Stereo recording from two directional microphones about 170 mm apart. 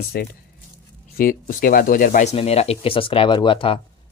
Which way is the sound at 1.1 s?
55° left (ahead or behind).